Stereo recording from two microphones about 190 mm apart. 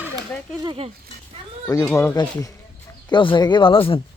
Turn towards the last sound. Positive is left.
turn(degrees=30)  # may be behind; listen again after turning